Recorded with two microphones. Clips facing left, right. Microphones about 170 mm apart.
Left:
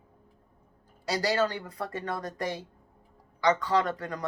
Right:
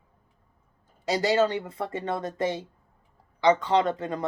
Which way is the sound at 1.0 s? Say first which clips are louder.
Right 4 dB; 20° right (ahead or behind).